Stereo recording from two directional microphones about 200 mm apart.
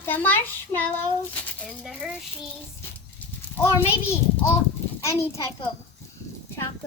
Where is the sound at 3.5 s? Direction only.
10° left (ahead or behind).